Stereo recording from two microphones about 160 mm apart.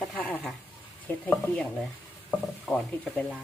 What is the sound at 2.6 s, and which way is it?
Speech, 5° left (ahead or behind).